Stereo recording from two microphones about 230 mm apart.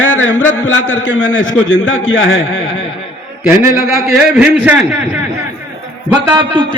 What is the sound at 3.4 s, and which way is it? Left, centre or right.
A man's voice, centre.